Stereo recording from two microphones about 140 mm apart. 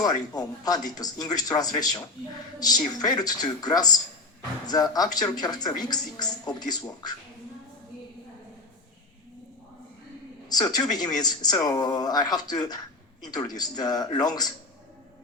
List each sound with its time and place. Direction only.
0.0 s speech: 25° left (ahead or behind)
10.5 s speech: 30° left (ahead or behind)